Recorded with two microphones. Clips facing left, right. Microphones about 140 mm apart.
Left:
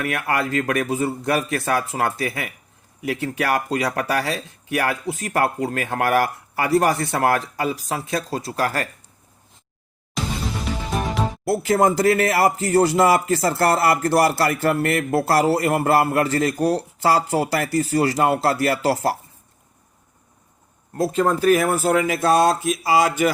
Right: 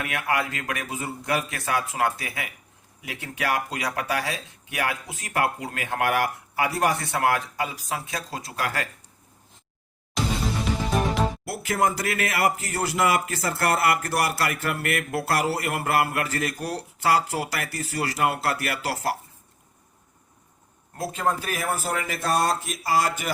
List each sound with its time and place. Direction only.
0.0 s speech: 45° left (ahead or behind)
11.4 s speech: 30° left (ahead or behind)
21.2 s speech: 60° left (ahead or behind); by 23.3 s 90° left